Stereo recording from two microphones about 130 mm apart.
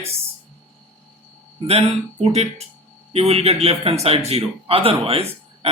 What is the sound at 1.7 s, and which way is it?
Speech, 50° right (ahead or behind).